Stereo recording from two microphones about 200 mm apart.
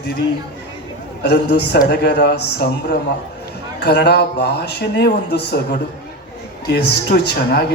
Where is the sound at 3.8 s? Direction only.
55° left (ahead or behind).